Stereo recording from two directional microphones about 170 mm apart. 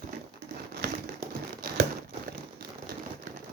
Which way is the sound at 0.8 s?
65° right (ahead or behind).